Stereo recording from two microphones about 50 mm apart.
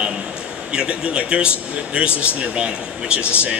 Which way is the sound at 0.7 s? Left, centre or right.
Right.